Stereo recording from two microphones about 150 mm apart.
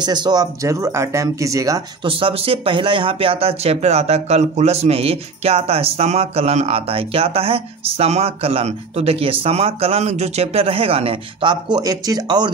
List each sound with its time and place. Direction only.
0.0 s speech: 30° right (ahead or behind)
2.0 s speech: 35° right (ahead or behind)